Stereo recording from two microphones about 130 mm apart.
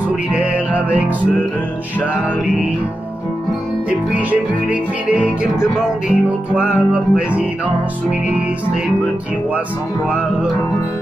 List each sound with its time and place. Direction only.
0.1 s music: 10° right (ahead or behind)
4.1 s music: 10° right (ahead or behind)